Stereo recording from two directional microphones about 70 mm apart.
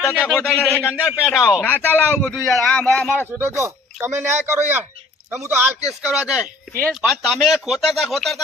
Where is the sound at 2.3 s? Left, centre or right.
Centre.